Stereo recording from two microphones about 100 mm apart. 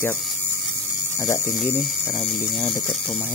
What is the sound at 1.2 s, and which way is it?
Speech, 25° left (ahead or behind).